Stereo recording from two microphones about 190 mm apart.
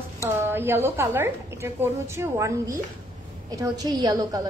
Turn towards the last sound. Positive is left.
turn(degrees=-20)  # may be behind; listen again after turning